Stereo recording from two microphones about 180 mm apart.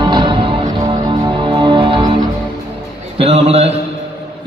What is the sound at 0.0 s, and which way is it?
Music, 25° right (ahead or behind).